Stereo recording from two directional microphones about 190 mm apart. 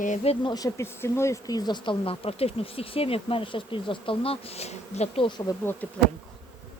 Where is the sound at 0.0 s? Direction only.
40° left (ahead or behind).